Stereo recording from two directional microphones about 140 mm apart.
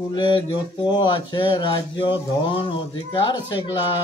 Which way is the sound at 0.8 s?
30° left (ahead or behind).